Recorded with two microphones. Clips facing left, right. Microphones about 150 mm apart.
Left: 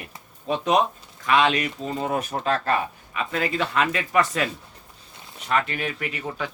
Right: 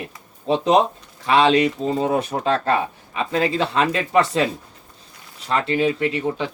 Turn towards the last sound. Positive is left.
turn(degrees=-25)  # may be behind; listen again after turning